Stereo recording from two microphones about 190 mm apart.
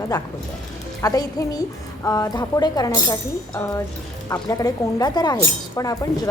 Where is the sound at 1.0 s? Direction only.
20° left (ahead or behind).